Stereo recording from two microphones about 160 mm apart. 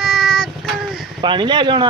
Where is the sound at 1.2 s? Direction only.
30° right (ahead or behind).